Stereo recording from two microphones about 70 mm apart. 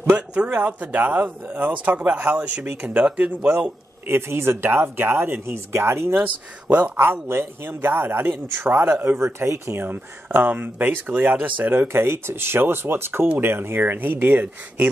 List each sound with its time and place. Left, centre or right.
0.1 s speech: right
3.1 s speech: centre
4.1 s speech: right
5.7 s speech: right
6.1 s speech: right
11.9 s speech: right